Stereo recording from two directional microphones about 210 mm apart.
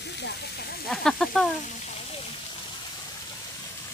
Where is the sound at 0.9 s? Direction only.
Centre (ahead or behind).